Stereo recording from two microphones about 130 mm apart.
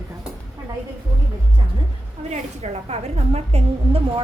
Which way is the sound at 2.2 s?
60° right (ahead or behind).